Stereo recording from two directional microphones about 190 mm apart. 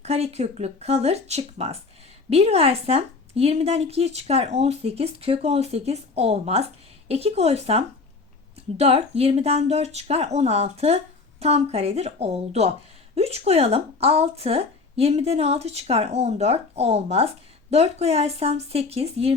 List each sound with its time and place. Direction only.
0.0 s speech: 35° right (ahead or behind)